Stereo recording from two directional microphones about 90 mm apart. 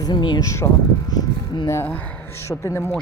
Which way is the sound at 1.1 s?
50° left (ahead or behind).